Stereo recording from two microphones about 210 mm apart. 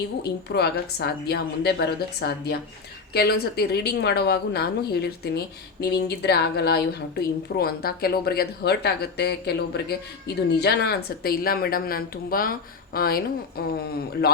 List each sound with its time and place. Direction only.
0.2 s a woman's voice: 50° left (ahead or behind)